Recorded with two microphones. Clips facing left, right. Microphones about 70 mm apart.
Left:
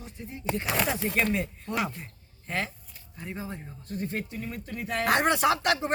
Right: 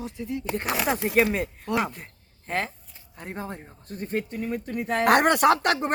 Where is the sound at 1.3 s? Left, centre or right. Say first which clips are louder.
Right 4 dB; right.